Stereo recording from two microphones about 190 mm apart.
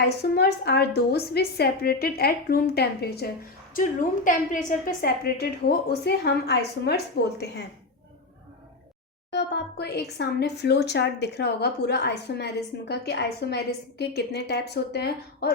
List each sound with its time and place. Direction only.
0.2 s speech: 60° left (ahead or behind)
3.8 s speech: 45° left (ahead or behind); by 7.6 s 60° left (ahead or behind)
9.3 s speech: 60° left (ahead or behind)